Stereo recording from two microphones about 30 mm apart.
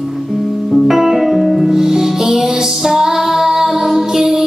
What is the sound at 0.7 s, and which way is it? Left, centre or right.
Music, centre.